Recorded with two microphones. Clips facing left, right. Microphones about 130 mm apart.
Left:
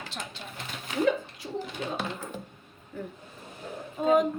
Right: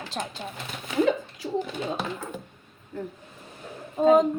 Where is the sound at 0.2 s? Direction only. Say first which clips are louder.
Right 8 dB; 45° right (ahead or behind).